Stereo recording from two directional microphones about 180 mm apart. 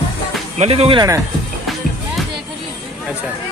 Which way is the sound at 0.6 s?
35° right (ahead or behind).